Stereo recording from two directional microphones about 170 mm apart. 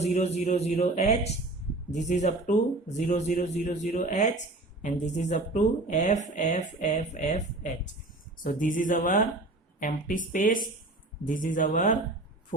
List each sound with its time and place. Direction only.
0.0 s speech: 40° left (ahead or behind)